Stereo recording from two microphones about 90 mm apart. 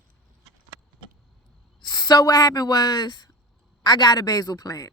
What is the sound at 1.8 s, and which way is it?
Speech, 50° left (ahead or behind).